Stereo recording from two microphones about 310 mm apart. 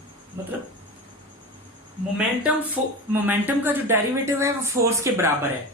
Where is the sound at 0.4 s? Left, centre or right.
Centre.